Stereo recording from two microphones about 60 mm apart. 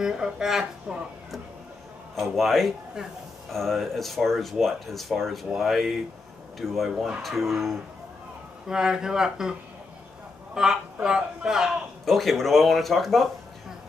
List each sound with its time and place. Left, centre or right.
0.0 s a man's voice: centre
2.1 s speech: centre
8.6 s a man's voice: centre
12.0 s speech: centre